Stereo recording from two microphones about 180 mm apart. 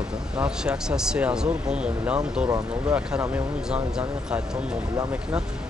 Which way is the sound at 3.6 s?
5° right (ahead or behind).